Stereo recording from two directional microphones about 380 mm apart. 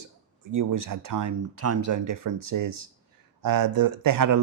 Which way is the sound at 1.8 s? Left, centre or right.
Right.